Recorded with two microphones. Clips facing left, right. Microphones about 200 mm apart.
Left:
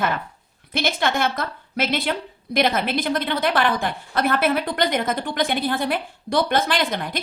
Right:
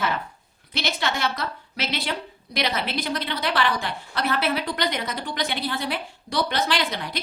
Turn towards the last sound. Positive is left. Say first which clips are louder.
# left 3 dB
turn(degrees=50)  # may be behind; listen again after turning